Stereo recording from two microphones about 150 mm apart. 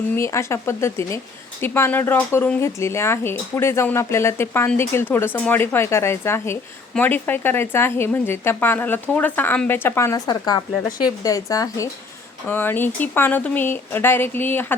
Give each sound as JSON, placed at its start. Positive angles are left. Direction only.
{"t": 0.2, "sound": "a woman's voice", "side_deg": 20}